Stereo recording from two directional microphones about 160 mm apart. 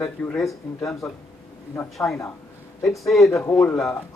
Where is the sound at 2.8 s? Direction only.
Centre (ahead or behind).